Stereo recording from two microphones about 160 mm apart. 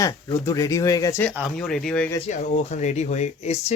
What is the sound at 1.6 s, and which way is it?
Speech, 5° left (ahead or behind).